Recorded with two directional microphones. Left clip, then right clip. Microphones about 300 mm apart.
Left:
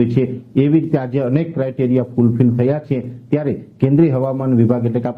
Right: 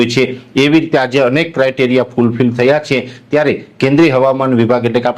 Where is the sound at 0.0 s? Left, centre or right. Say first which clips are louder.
Right 6 dB; centre.